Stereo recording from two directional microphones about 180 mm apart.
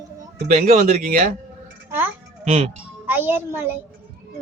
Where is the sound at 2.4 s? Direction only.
40° right (ahead or behind).